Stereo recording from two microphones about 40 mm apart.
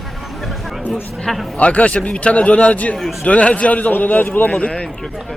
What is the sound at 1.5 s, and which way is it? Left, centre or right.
A man's voice, left.